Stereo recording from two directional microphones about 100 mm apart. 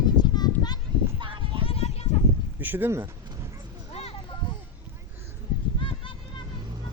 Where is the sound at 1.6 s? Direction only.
80° left.